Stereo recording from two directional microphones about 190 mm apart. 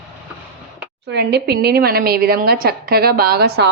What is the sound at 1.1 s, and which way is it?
A woman's voice, 60° right (ahead or behind).